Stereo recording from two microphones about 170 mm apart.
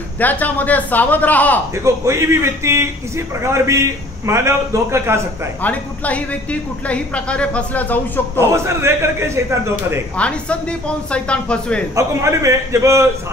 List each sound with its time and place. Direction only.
0.2 s a woman's voice: 10° left (ahead or behind)
1.8 s a man's voice: 15° right (ahead or behind)
5.6 s a woman's voice: 10° left (ahead or behind)
8.4 s a man's voice: 15° right (ahead or behind)
10.1 s a woman's voice: 5° left (ahead or behind)
11.9 s a man's voice: 15° right (ahead or behind)